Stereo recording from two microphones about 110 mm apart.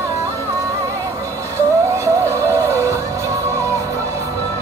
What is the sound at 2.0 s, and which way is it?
Music, 25° right (ahead or behind).